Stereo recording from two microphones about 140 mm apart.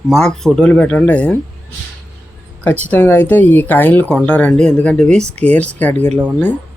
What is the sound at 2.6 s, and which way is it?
Speech, 10° left (ahead or behind).